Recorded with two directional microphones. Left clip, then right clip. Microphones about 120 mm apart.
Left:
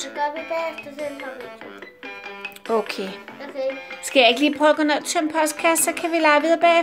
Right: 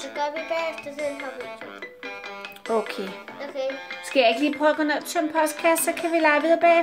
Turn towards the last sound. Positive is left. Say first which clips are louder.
# left 2 dB
turn(degrees=10)  # may be behind; listen again after turning